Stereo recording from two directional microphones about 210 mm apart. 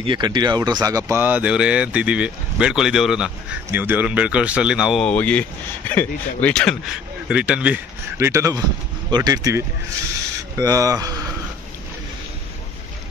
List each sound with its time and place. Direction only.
0.0 s speech: 20° right (ahead or behind)